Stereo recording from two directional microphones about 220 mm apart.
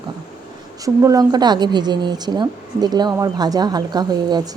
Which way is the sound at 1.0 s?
15° right (ahead or behind).